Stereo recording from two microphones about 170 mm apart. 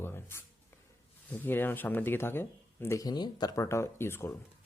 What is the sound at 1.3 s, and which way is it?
Speech, 10° left (ahead or behind).